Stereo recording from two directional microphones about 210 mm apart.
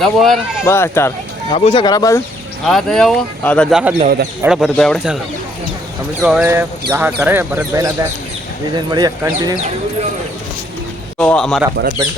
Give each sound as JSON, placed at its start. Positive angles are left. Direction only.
{"t": 0.0, "sound": "speech", "side_deg": 0}
{"t": 0.6, "sound": "speech", "side_deg": 10}
{"t": 1.5, "sound": "speech", "side_deg": 30}
{"t": 2.6, "sound": "speech", "side_deg": 0}
{"t": 6.2, "sound": "speech", "side_deg": -5}
{"t": 11.2, "sound": "speech", "side_deg": 5}